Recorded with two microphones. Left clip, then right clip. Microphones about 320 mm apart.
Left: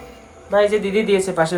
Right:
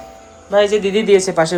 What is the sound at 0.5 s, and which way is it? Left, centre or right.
Speech, centre.